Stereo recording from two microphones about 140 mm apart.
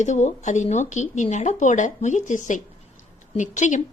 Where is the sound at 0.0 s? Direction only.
60° left (ahead or behind).